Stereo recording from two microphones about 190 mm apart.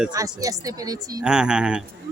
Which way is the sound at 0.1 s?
20° right (ahead or behind).